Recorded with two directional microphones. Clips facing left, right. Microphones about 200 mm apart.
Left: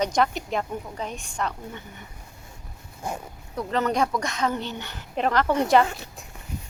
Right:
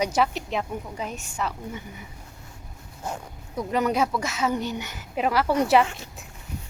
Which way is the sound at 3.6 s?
10° right (ahead or behind).